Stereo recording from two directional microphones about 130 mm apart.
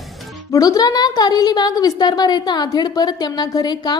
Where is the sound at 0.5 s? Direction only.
25° left (ahead or behind).